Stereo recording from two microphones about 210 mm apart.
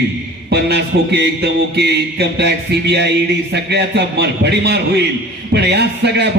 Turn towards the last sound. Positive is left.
turn(degrees=-50)  # may be behind; listen again after turning